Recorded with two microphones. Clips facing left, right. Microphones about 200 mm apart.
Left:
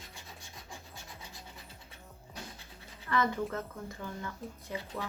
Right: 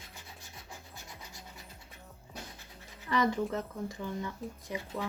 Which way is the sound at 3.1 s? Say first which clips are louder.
Right 2 dB; 15° right (ahead or behind).